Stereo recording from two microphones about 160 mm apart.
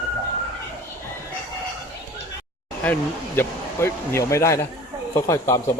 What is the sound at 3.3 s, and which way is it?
Speech, 15° left (ahead or behind).